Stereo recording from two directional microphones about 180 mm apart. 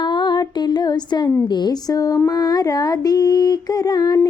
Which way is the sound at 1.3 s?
25° left (ahead or behind).